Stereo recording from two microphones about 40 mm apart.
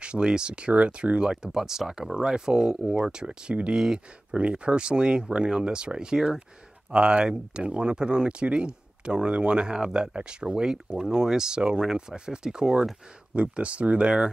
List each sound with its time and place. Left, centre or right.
0.0 s speech: right
13.3 s speech: right